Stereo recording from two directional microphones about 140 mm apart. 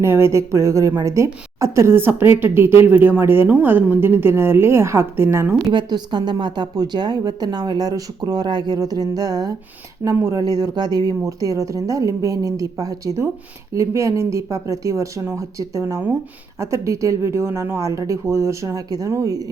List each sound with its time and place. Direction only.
0.0 s speech: 20° right (ahead or behind)
5.7 s a woman's voice: 30° right (ahead or behind)